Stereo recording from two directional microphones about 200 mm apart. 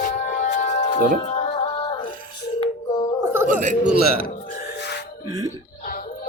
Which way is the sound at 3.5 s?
40° right (ahead or behind).